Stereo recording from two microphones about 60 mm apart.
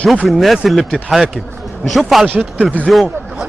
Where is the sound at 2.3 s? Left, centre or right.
Right.